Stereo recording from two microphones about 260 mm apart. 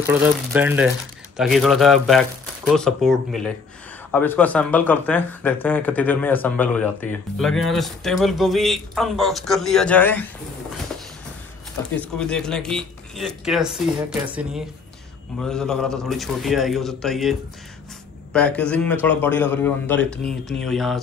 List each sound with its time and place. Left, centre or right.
0.0 s a man's voice: centre
11.9 s a man's voice: centre